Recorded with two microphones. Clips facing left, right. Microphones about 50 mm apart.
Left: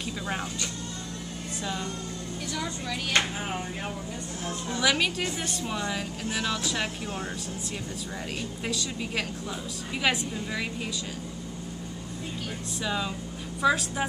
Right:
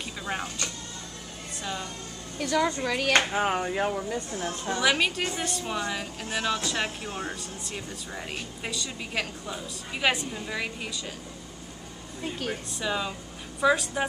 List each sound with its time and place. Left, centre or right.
1.6 s a woman's voice: centre
2.4 s a woman's voice: right
3.3 s speech: right
4.8 s a woman's voice: centre
8.6 s a woman's voice: centre
12.8 s a woman's voice: centre